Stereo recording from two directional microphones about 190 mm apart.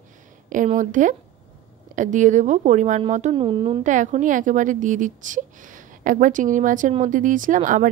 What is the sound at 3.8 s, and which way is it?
A woman's voice, 40° right (ahead or behind).